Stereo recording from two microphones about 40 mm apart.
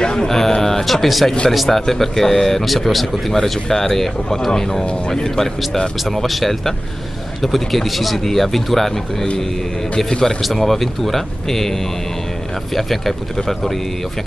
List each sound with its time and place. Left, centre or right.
0.0 s a sound: left
0.3 s speech: centre
12.7 s speech: centre